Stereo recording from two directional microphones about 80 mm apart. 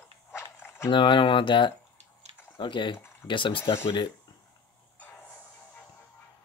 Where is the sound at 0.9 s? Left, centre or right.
Left.